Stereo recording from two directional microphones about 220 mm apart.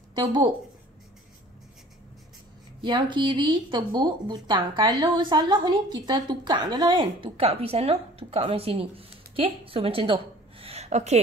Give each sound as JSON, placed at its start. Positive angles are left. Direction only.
{"t": 0.1, "sound": "speech", "side_deg": -20}
{"t": 2.8, "sound": "speech", "side_deg": -20}